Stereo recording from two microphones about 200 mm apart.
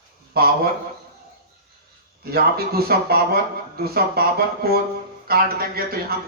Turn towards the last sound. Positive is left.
turn(degrees=-50)  # may be behind; listen again after turning